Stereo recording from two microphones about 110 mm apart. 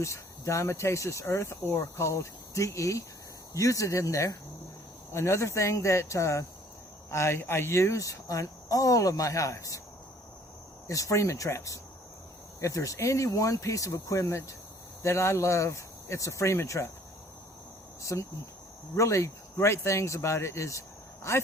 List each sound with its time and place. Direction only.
0.0 s speech: 25° left (ahead or behind)
10.8 s speech: 30° left (ahead or behind)
18.0 s speech: 30° left (ahead or behind)